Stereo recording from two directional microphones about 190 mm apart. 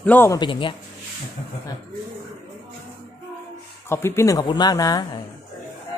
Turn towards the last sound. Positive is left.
turn(degrees=20)  # may be behind; listen again after turning